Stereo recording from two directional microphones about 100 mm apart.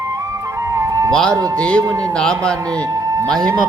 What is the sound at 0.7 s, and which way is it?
Music, 30° right (ahead or behind).